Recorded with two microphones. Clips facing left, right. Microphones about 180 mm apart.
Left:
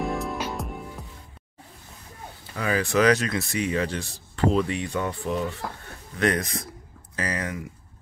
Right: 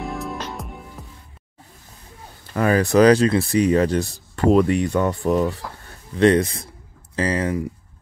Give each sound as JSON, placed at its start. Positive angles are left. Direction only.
{"t": 0.0, "sound": "music", "side_deg": 0}
{"t": 2.5, "sound": "speech", "side_deg": -50}
{"t": 6.1, "sound": "speech", "side_deg": -30}